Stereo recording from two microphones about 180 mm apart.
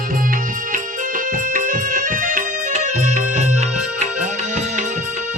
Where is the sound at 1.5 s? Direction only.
50° right (ahead or behind).